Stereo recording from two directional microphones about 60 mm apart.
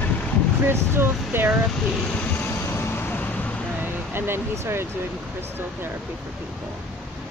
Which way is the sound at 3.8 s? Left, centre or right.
Right.